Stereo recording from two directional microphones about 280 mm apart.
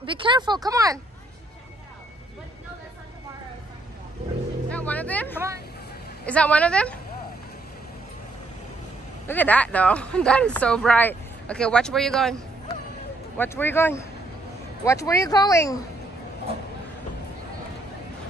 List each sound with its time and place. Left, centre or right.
0.0 s speech: centre
4.6 s music: centre
6.2 s speech: centre
9.3 s speech: centre
13.4 s speech: centre